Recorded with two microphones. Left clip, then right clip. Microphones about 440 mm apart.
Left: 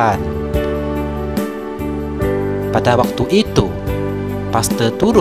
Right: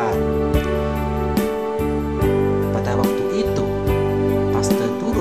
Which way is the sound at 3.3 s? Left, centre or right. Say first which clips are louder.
Left 5 dB; left.